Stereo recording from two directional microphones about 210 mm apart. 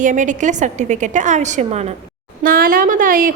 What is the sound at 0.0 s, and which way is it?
A woman's voice, 35° right (ahead or behind).